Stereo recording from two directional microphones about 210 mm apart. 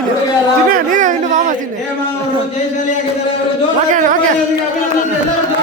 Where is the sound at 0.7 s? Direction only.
40° right (ahead or behind).